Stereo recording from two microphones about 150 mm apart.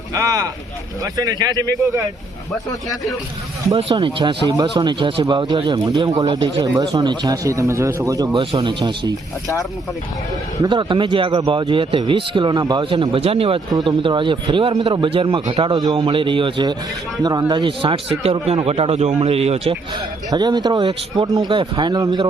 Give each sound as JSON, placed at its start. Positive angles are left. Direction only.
{"t": 0.1, "sound": "speech", "side_deg": -25}
{"t": 3.9, "sound": "speech", "side_deg": -30}
{"t": 10.6, "sound": "speech", "side_deg": -30}
{"t": 20.3, "sound": "speech", "side_deg": -30}